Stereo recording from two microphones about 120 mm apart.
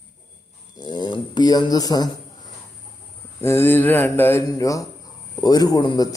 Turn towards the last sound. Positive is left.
turn(degrees=35)  # may be behind; listen again after turning